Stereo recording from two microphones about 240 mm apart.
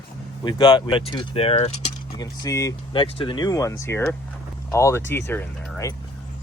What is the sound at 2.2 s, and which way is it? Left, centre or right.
Speech, centre.